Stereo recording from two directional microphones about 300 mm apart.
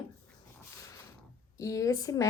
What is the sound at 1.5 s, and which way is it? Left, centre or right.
Speech, centre.